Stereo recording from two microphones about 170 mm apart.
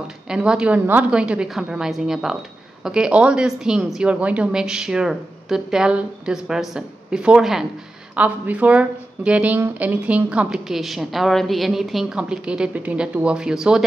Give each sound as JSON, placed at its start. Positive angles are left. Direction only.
{"t": 0.3, "sound": "speech", "side_deg": -5}